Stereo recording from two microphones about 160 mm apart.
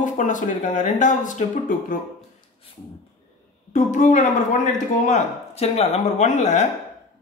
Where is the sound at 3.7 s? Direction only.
50° left (ahead or behind).